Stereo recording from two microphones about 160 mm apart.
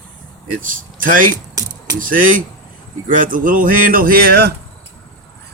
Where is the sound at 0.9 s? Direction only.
55° right (ahead or behind); by 4.5 s 80° right.